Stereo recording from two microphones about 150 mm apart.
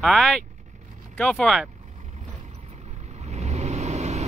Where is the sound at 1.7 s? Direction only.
50° right (ahead or behind).